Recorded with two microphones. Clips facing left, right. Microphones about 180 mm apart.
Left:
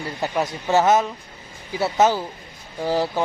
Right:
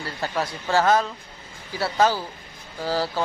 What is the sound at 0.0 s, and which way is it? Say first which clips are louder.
Speech: left 3 dB; 20° left (ahead or behind).